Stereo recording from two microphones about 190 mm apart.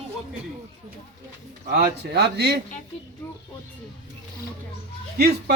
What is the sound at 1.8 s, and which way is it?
Speech, 60° right (ahead or behind).